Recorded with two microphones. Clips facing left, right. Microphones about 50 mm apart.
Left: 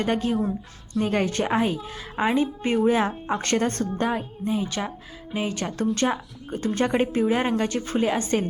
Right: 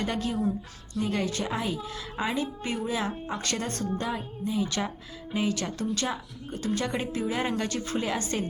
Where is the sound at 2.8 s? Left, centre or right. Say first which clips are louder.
Left 10 dB; left.